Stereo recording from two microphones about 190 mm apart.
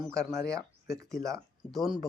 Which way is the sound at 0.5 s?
15° right (ahead or behind).